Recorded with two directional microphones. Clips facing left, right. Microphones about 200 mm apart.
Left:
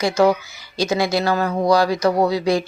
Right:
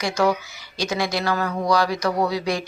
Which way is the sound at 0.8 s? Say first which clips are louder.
Left 5 dB; 25° left (ahead or behind).